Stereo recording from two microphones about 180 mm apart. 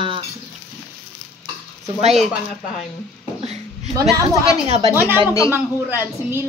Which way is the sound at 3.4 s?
35° right (ahead or behind).